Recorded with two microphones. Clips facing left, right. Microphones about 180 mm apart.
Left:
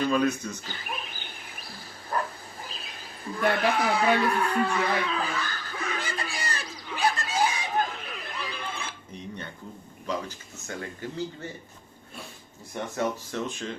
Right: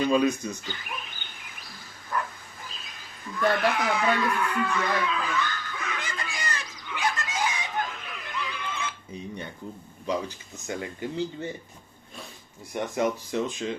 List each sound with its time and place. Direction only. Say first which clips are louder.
0.1 s speech: right 2 dB; 15° right (ahead or behind)
0.6 s a sound: left 1 dB; 35° left (ahead or behind)
3.4 s speech: right 1 dB; 10° left (ahead or behind)
3.7 s a sound: left 2 dB; 30° left (ahead or behind)
10.1 s speech: right 3 dB; 15° right (ahead or behind)
12.7 s speech: right 3 dB; 15° right (ahead or behind)